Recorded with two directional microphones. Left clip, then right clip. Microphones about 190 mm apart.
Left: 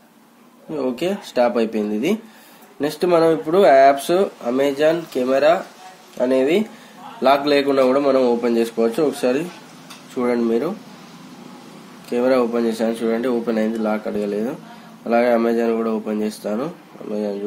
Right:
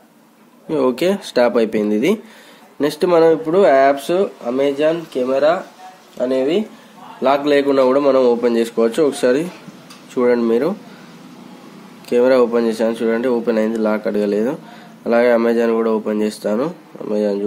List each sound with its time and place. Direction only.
0.7 s speech: 35° right (ahead or behind)
3.4 s speech: 10° right (ahead or behind); by 6.6 s 10° left (ahead or behind)
7.2 s speech: 10° right (ahead or behind); by 10.7 s 30° right (ahead or behind)
12.1 s speech: 30° right (ahead or behind)